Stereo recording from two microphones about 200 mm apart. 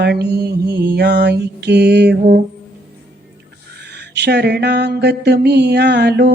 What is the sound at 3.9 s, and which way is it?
Mantra, 55° right (ahead or behind).